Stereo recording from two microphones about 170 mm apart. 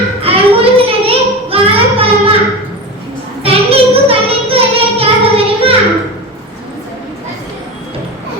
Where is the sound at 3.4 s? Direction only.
35° right (ahead or behind).